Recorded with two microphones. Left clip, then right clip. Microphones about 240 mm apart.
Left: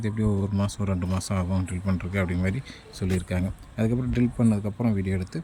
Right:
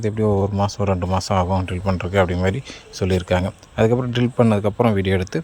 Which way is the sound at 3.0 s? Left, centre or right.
Right.